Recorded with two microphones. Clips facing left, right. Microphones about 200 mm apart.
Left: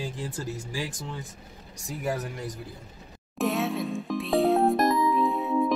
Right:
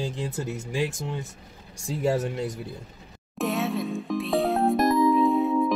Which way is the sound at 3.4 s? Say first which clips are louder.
Even; centre (ahead or behind).